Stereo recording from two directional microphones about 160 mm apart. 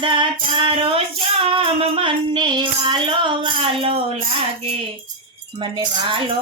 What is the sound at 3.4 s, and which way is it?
Speech, 35° right (ahead or behind).